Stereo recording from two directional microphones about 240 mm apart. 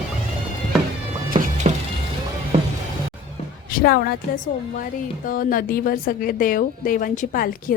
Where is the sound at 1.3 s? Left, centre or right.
Right.